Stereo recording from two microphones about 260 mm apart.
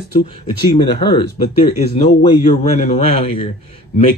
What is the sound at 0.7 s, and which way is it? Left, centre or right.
Speech, centre.